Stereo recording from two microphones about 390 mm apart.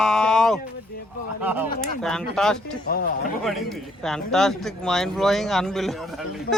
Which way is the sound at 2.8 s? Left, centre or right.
Left.